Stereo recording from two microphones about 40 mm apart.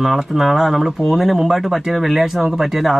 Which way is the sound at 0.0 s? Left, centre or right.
Centre.